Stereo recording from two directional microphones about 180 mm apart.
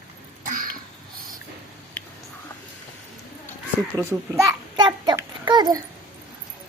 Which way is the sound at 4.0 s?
15° right (ahead or behind).